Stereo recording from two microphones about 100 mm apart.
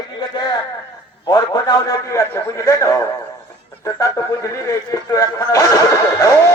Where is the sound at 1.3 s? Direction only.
40° left (ahead or behind).